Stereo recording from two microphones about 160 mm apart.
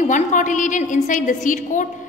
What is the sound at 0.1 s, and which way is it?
A woman's voice, 50° left (ahead or behind).